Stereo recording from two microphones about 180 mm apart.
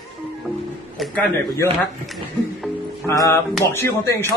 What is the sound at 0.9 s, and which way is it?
A man's voice, centre (ahead or behind).